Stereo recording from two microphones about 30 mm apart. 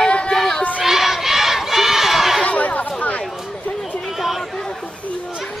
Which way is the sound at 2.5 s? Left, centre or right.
Left.